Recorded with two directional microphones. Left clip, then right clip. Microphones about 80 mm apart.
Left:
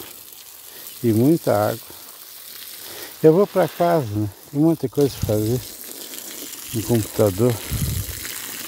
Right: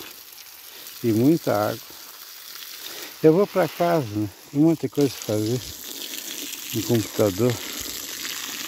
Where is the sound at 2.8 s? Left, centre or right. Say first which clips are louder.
Left 3 dB; centre.